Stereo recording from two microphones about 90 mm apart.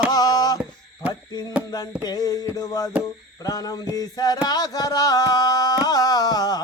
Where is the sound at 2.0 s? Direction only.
45° left (ahead or behind).